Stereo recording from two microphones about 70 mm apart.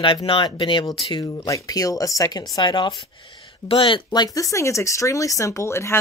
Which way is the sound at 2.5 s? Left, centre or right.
Left.